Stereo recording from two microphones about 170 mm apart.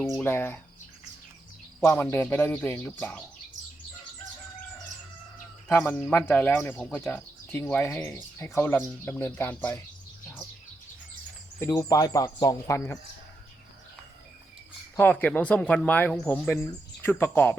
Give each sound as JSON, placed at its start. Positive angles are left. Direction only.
{"t": 0.2, "sound": "speech", "side_deg": 15}
{"t": 1.8, "sound": "speech", "side_deg": 15}
{"t": 5.6, "sound": "speech", "side_deg": 10}
{"t": 11.6, "sound": "speech", "side_deg": 20}
{"t": 14.9, "sound": "speech", "side_deg": 10}